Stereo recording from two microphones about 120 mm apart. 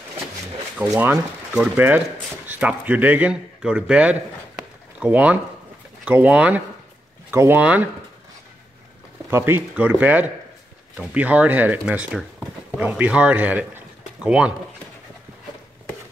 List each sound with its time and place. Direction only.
0.9 s speech: 15° right (ahead or behind)
9.3 s a man's voice: 15° right (ahead or behind)